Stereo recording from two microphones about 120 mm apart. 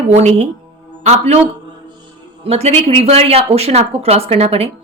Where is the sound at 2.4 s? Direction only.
60° right (ahead or behind).